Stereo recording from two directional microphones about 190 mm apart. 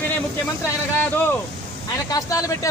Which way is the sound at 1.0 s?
10° left (ahead or behind).